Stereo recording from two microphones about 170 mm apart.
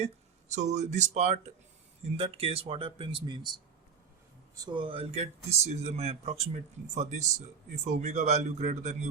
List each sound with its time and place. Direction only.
0.5 s speech: 45° right (ahead or behind)